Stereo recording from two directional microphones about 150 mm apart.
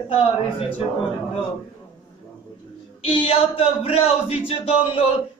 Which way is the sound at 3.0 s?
40° left (ahead or behind).